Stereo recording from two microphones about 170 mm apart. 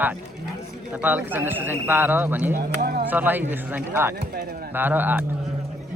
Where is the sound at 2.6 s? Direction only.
60° right (ahead or behind).